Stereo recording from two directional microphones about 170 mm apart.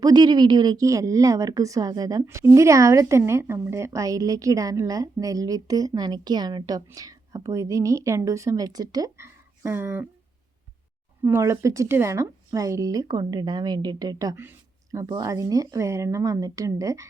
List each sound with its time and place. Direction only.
0.0 s speech: 25° right (ahead or behind)
11.2 s speech: 15° right (ahead or behind)